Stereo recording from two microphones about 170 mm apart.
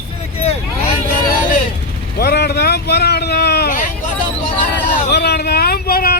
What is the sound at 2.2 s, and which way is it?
Vehicle, 75° left (ahead or behind).